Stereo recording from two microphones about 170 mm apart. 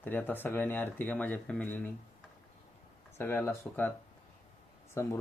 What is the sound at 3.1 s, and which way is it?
Speech, 15° left (ahead or behind).